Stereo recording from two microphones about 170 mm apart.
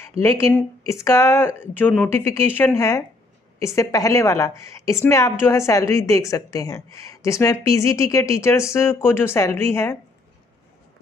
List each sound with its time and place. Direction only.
0.2 s a woman's voice: 15° left (ahead or behind)